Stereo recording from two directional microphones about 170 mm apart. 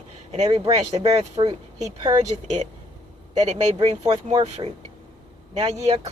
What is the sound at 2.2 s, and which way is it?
Speech, 45° right (ahead or behind).